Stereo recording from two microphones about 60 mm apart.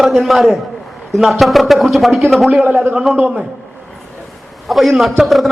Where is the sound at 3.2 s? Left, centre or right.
Right.